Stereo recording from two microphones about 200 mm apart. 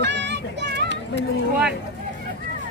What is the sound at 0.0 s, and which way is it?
Children playing, 60° right (ahead or behind).